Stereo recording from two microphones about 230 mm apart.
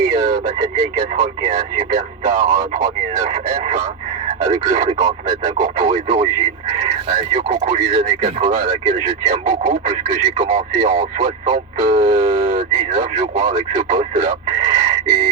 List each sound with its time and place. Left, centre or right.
0.0 s speech: right
7.3 s speech: right